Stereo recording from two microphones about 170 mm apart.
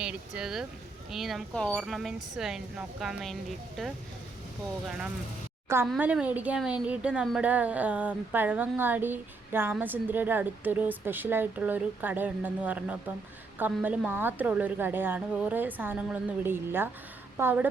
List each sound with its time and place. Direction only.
0.0 s speech: 5° right (ahead or behind)
5.6 s a woman's voice: 15° right (ahead or behind)